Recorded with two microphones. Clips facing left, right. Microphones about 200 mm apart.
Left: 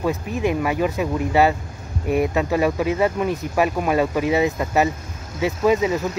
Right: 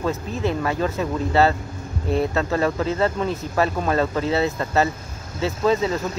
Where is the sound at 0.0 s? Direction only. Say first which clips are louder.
Left 2 dB; 15° left (ahead or behind).